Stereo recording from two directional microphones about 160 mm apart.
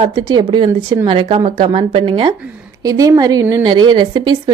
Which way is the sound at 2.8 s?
20° right (ahead or behind).